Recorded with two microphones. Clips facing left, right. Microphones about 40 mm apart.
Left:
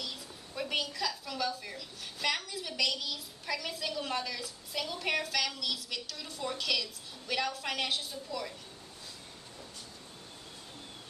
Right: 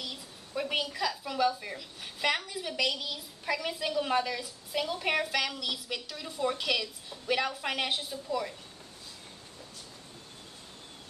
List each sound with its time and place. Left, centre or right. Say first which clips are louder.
0.0 s a woman's voice: right 1 dB; centre